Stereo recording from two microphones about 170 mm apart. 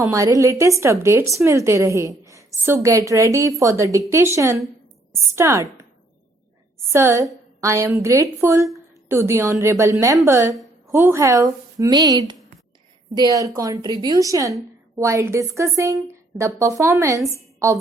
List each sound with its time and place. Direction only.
0.0 s a woman's voice: 20° right (ahead or behind)
6.7 s a woman's voice: 15° right (ahead or behind)